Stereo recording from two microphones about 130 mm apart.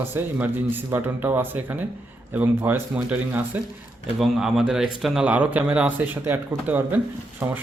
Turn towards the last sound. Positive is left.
turn(degrees=-15)  # may be behind; listen again after turning